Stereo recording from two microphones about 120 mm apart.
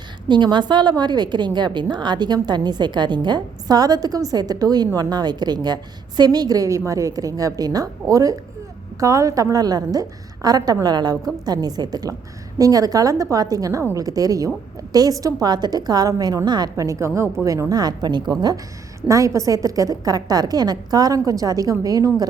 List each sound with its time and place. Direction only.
0.3 s a woman's voice: 40° right (ahead or behind)